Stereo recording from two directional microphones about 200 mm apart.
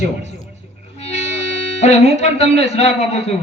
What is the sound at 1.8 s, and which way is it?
A man's voice, 35° left (ahead or behind).